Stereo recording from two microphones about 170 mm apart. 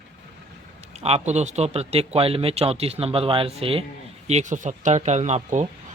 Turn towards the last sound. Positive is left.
turn(degrees=-40)  # may be behind; listen again after turning